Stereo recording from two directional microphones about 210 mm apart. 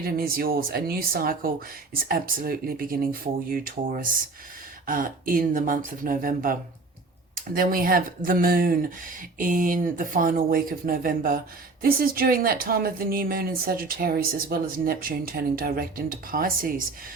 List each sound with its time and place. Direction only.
0.0 s speech: 45° right (ahead or behind)